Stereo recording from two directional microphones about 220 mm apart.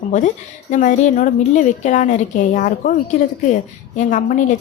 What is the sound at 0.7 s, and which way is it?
A woman's voice, 35° left (ahead or behind).